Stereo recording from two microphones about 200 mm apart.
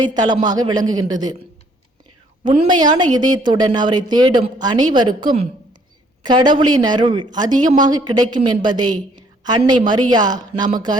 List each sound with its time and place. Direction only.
0.0 s a woman's voice: 20° right (ahead or behind)
2.4 s a woman's voice: 25° right (ahead or behind)